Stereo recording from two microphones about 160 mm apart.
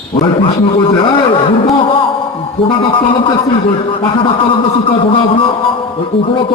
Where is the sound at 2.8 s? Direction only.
35° left (ahead or behind).